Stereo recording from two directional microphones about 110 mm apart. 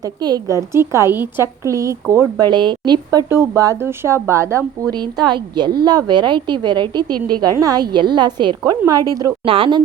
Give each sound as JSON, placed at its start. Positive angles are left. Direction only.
{"t": 0.0, "sound": "a woman's voice", "side_deg": -35}
{"t": 2.4, "sound": "a woman's voice", "side_deg": -40}
{"t": 3.2, "sound": "a woman's voice", "side_deg": -25}
{"t": 4.9, "sound": "a woman's voice", "side_deg": -40}
{"t": 9.4, "sound": "speech", "side_deg": -50}